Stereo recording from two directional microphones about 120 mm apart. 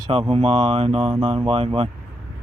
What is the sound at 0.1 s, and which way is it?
Speech, 50° right (ahead or behind).